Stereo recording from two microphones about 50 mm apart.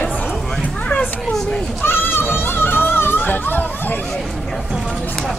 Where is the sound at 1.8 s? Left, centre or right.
Left.